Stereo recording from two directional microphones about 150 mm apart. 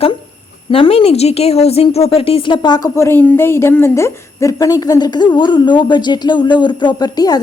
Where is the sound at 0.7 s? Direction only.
40° left (ahead or behind).